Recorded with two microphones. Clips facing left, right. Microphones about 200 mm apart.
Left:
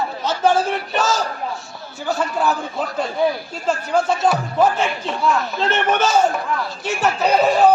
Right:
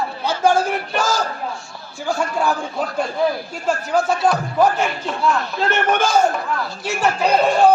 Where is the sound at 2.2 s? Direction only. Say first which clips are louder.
Even; 10° right (ahead or behind).